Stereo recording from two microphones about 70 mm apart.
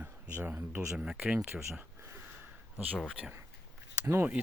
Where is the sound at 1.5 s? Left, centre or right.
Right.